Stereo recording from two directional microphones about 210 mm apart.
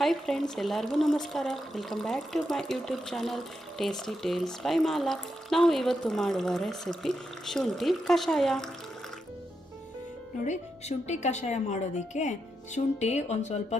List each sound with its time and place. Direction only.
0.0 s speech: centre (ahead or behind)
10.4 s a woman's voice: 35° left (ahead or behind)